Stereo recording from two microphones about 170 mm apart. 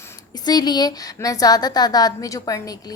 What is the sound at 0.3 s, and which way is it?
A woman's voice, 25° left (ahead or behind).